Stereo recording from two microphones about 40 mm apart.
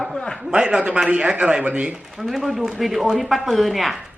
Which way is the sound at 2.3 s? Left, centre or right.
Centre.